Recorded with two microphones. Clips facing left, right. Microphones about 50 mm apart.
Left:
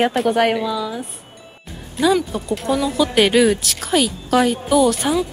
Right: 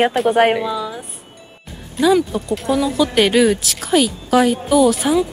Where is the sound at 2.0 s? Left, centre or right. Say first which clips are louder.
Right 2 dB; centre.